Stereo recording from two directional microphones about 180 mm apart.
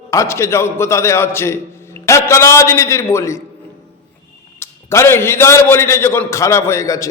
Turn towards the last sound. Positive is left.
turn(degrees=15)  # may be behind; listen again after turning